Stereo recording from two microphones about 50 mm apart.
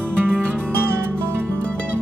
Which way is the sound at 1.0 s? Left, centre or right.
Right.